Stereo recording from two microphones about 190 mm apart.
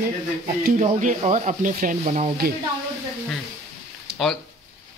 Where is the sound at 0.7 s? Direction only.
40° right (ahead or behind).